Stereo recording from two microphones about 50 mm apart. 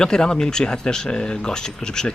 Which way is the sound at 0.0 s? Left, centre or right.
Centre.